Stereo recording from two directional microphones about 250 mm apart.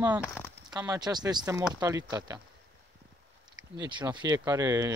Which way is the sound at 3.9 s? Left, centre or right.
Centre.